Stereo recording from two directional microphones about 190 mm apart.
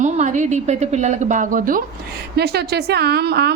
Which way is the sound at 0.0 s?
40° right (ahead or behind).